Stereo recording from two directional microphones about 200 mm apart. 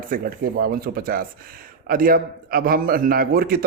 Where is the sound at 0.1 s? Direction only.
50° right (ahead or behind).